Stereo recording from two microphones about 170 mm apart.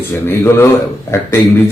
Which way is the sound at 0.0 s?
15° left (ahead or behind).